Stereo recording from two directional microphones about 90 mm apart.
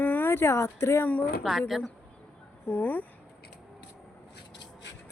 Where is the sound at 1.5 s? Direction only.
Centre (ahead or behind).